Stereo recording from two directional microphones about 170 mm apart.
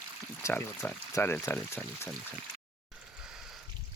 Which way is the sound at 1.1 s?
15° left (ahead or behind).